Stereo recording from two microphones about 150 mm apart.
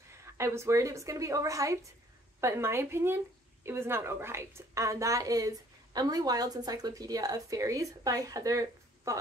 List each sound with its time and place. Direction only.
0.1 s a woman's voice: 20° right (ahead or behind)